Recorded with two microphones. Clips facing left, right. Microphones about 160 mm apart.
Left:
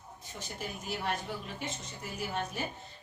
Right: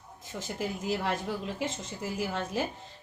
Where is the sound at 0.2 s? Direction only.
90° right.